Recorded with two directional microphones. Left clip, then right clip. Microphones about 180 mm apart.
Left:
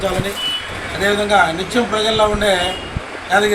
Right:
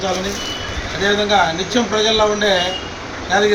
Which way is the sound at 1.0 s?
15° left (ahead or behind).